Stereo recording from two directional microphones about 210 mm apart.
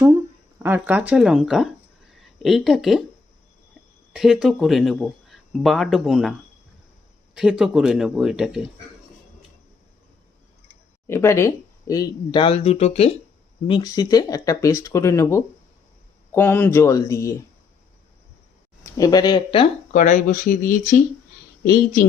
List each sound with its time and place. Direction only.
0.6 s speech: 10° right (ahead or behind)
4.1 s speech: centre (ahead or behind)
7.3 s speech: centre (ahead or behind)
11.0 s speech: 10° left (ahead or behind)
18.9 s speech: 15° left (ahead or behind)
19.9 s speech: 35° left (ahead or behind)